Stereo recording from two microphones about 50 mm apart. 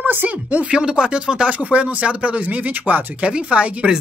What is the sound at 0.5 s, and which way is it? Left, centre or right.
Speech, right.